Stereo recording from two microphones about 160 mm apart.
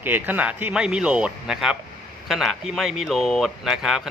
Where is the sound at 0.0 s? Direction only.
10° right (ahead or behind).